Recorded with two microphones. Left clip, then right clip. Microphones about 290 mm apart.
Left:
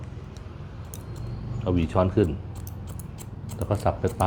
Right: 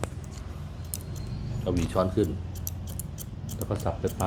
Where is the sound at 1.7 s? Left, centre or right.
Centre.